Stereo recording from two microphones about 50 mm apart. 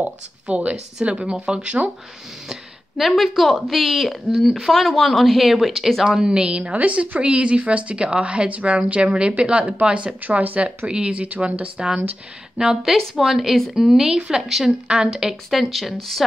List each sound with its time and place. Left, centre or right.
0.6 s speech: centre
2.4 s speech: centre
6.0 s speech: centre; by 10.7 s right
10.9 s speech: centre
11.4 s speech: right
12.5 s speech: centre